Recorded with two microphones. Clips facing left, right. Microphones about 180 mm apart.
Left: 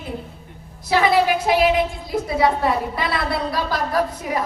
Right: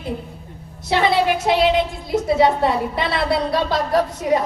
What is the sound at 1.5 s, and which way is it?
A woman's voice, 25° right (ahead or behind).